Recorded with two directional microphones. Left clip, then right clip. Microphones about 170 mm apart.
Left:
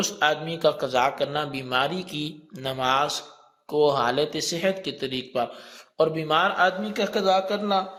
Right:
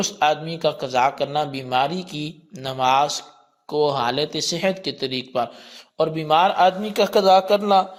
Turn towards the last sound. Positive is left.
turn(degrees=-40)  # may be behind; listen again after turning